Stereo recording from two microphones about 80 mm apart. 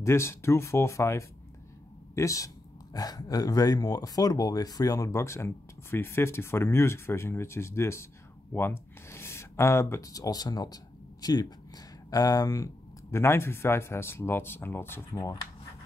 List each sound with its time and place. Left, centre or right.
0.0 s speech: left